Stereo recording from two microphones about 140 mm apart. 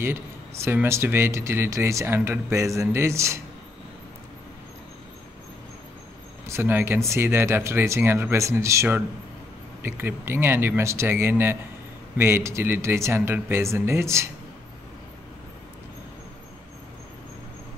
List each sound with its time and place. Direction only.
0.0 s speech: 15° right (ahead or behind)
6.4 s speech: 20° right (ahead or behind)